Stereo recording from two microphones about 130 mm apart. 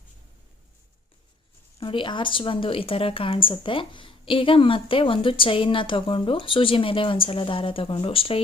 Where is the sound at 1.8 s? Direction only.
40° left (ahead or behind).